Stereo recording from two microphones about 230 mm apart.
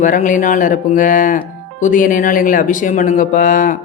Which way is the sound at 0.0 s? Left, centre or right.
Left.